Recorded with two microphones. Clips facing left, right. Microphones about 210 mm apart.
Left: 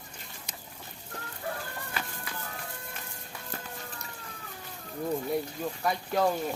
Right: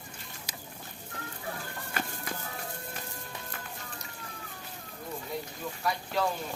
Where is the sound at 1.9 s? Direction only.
45° right (ahead or behind).